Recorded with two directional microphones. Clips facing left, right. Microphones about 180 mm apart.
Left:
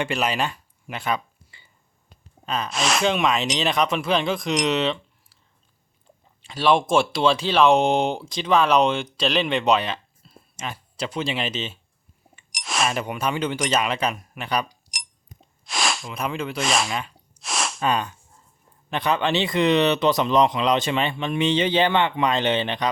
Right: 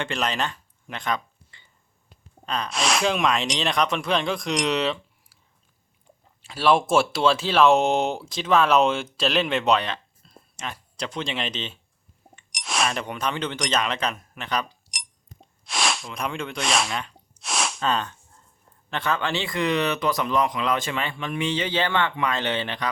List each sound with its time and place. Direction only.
0.0 s a sound: 10° left (ahead or behind)
2.5 s speech: 5° left (ahead or behind)
6.4 s speech: 5° right (ahead or behind); by 14.8 s 10° left (ahead or behind)
15.4 s sneeze: centre (ahead or behind)
17.8 s a sound: 10° left (ahead or behind)
18.9 s speech: 15° left (ahead or behind)